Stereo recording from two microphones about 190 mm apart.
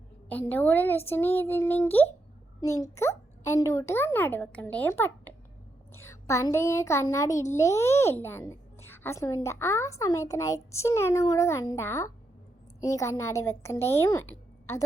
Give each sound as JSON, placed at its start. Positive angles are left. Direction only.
{"t": 0.3, "sound": "a child's voice", "side_deg": 10}